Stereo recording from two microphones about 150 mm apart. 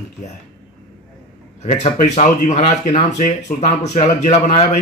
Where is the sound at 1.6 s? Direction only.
50° left (ahead or behind).